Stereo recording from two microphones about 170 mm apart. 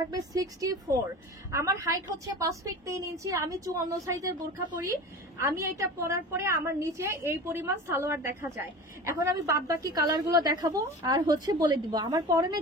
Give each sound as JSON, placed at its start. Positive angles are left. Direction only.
{"t": 0.3, "sound": "a woman's voice", "side_deg": -20}
{"t": 5.4, "sound": "a woman's voice", "side_deg": -15}